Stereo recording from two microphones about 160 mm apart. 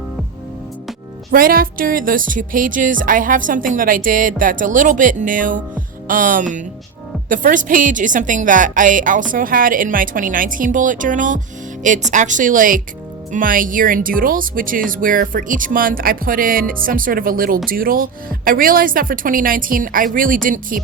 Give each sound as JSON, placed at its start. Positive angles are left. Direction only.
{"t": 1.3, "sound": "speech", "side_deg": -65}